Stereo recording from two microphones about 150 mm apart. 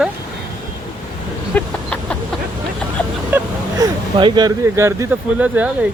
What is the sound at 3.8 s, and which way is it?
Speech, 30° right (ahead or behind).